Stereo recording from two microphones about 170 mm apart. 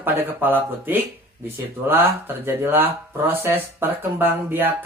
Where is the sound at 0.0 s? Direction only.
10° right (ahead or behind).